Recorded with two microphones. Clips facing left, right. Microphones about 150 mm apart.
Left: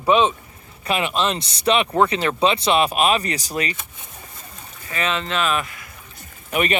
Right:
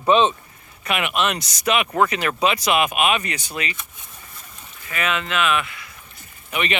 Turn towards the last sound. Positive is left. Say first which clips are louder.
# left 4 dB
turn(degrees=45)  # may be behind; listen again after turning